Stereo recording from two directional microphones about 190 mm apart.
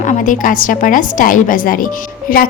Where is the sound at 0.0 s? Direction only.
40° left (ahead or behind).